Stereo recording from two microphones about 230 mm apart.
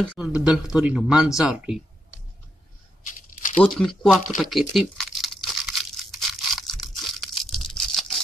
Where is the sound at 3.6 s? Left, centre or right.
Centre.